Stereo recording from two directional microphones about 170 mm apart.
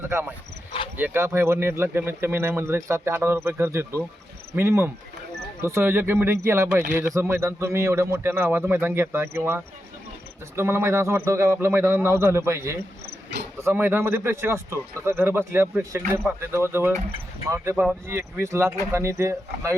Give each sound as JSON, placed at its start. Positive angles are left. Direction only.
{"t": 0.1, "sound": "speech", "side_deg": -15}
{"t": 10.5, "sound": "speech", "side_deg": -15}